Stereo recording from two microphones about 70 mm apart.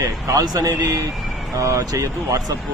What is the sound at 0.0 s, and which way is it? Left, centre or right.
Speech, right.